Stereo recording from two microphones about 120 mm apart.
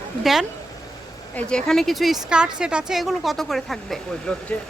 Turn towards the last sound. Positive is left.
turn(degrees=5)  # may be behind; listen again after turning